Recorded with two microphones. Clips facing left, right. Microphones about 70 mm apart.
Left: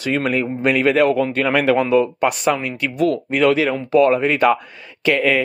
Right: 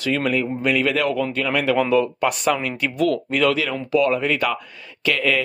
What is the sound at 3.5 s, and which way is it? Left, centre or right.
Speech, left.